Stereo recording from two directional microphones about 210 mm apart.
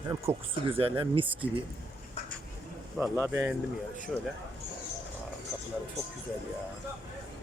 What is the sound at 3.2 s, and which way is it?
Speech, 10° right (ahead or behind).